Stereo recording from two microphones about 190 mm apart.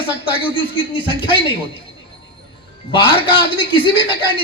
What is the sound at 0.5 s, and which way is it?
Speech, 25° left (ahead or behind).